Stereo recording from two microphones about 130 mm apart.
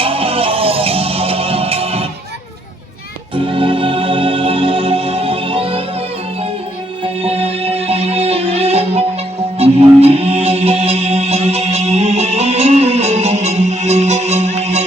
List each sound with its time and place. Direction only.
0.0 s music: 45° right (ahead or behind)
3.3 s music: 40° right (ahead or behind)
7.2 s music: 50° right (ahead or behind)